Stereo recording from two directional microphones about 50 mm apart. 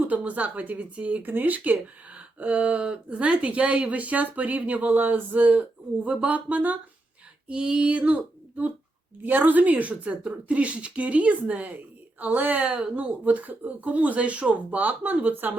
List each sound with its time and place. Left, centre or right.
0.1 s speech: right
1.2 s speech: right
7.4 s speech: right
13.0 s speech: right